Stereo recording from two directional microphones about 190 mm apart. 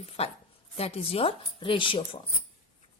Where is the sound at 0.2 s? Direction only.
30° left (ahead or behind).